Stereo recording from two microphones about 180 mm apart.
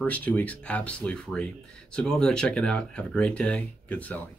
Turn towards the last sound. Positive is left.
turn(degrees=10)  # may be behind; listen again after turning